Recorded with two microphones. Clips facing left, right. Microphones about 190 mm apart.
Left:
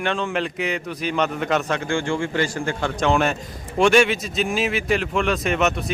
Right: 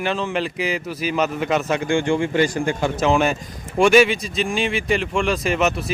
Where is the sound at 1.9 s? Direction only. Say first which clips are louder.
Right 4 dB; 20° right (ahead or behind).